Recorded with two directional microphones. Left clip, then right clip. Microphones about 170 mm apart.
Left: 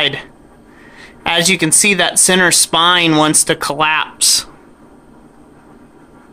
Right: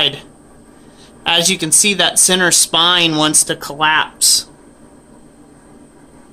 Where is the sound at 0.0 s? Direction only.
15° left (ahead or behind).